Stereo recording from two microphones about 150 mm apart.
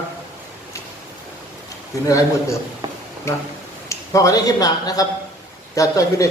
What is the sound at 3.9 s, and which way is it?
A man's voice, 20° left (ahead or behind).